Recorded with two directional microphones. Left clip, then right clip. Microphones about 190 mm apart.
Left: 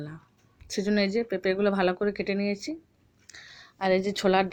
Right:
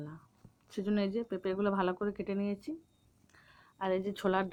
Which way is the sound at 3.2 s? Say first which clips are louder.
Left 14 dB; 25° left (ahead or behind).